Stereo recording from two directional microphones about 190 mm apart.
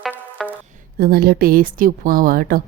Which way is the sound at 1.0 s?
55° right (ahead or behind).